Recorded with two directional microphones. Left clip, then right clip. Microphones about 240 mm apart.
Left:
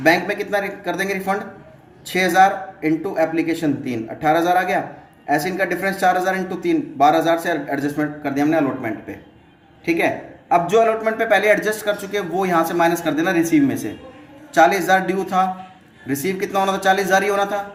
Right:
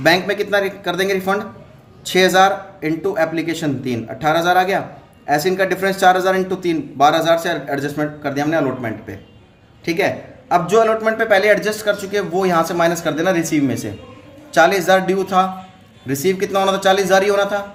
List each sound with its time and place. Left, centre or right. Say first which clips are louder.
0.0 s a man's voice: right 2 dB; right
10.5 s a man's voice: right 1 dB; right